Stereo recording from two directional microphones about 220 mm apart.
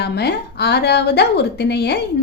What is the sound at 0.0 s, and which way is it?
A woman's voice, 50° left (ahead or behind).